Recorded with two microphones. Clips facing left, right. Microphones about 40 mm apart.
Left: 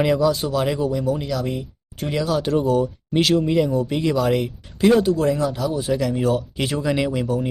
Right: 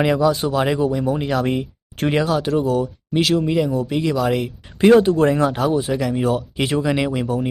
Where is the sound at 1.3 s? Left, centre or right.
Right.